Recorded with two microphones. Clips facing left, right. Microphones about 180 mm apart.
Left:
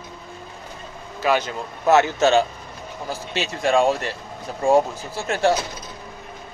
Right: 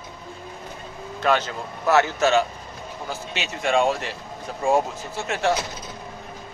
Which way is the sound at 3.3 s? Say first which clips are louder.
Left 3 dB; 35° left (ahead or behind).